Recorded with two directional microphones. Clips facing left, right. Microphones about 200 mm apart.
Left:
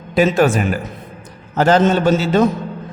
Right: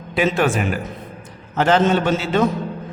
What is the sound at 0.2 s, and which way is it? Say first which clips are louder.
Speech: left 4 dB; 40° left (ahead or behind).